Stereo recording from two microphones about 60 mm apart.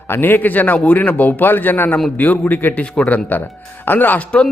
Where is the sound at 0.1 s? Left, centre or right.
Left.